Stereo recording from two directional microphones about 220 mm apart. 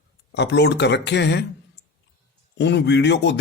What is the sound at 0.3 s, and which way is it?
Speech, 50° left (ahead or behind).